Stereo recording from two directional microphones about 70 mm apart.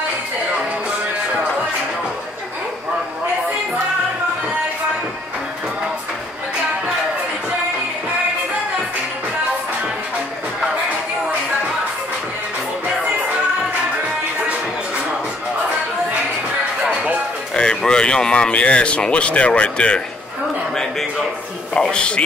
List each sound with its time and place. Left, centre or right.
17.6 s speech: centre
20.7 s a sound: centre
21.7 s speech: centre